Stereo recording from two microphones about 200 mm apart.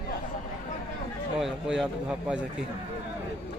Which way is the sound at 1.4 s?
Centre (ahead or behind).